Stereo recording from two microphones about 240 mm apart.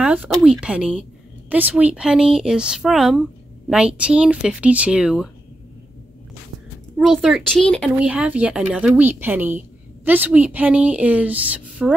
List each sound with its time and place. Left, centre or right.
0.0 s speech: centre
7.0 s speech: centre